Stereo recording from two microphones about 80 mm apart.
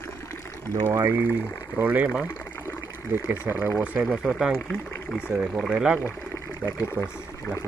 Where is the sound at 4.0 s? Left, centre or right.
Centre.